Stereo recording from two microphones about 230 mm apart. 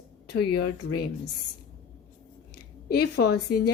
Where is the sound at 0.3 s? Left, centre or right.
Left.